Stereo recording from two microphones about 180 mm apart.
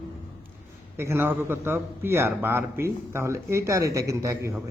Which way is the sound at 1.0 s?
15° right (ahead or behind).